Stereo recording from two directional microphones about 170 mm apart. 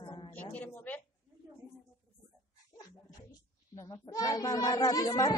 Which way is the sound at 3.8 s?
20° left (ahead or behind).